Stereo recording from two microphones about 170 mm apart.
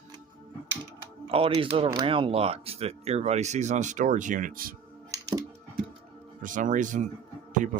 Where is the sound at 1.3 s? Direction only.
35° right (ahead or behind); by 4.7 s 55° right (ahead or behind).